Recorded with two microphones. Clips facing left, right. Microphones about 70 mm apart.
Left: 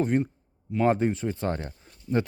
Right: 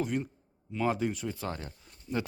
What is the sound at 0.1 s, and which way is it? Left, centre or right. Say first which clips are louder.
Speech: left 8 dB; left.